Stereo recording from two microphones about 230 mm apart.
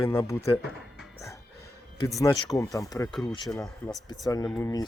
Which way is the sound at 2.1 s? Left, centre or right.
Centre.